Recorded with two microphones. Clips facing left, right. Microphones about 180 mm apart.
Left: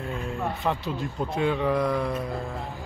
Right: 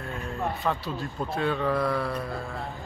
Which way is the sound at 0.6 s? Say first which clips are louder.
Left 1 dB; 20° left (ahead or behind).